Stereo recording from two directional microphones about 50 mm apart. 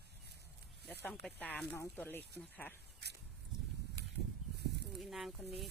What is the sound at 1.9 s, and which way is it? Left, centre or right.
Speech, left.